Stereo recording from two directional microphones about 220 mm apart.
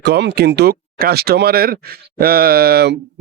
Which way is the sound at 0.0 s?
50° right (ahead or behind).